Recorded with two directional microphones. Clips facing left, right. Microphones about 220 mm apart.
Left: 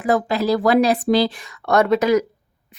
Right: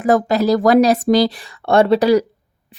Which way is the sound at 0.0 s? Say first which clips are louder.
Right 4 dB; 45° right (ahead or behind).